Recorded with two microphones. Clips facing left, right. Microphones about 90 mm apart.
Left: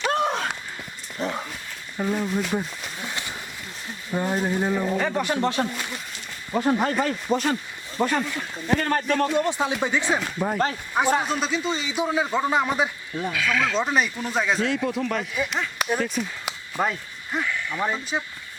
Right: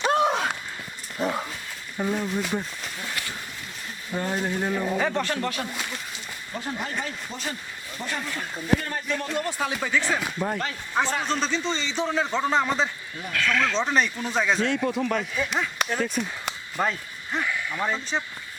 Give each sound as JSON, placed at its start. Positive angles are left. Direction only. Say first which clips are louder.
{"t": 0.1, "sound": "a sound", "louder": "right 3 dB", "side_deg": 0}
{"t": 2.0, "sound": "speech", "louder": "left 2 dB", "side_deg": 0}
{"t": 3.0, "sound": "a sound", "louder": "left 1 dB", "side_deg": 20}
{"t": 4.1, "sound": "a man's voice", "louder": "left 3 dB", "side_deg": 10}
{"t": 5.2, "sound": "a man's voice", "louder": "left 4 dB", "side_deg": 15}
{"t": 6.5, "sound": "speech", "louder": "left 10 dB", "side_deg": 65}
{"t": 8.2, "sound": "speech", "louder": "left 2 dB", "side_deg": 0}
{"t": 8.8, "sound": "speech", "louder": "left 7 dB", "side_deg": 60}
{"t": 9.3, "sound": "speech", "louder": "left 4 dB", "side_deg": 20}
{"t": 10.3, "sound": "a man's voice", "louder": "left 4 dB", "side_deg": 5}
{"t": 17.8, "sound": "a man's voice", "louder": "left 1 dB", "side_deg": 10}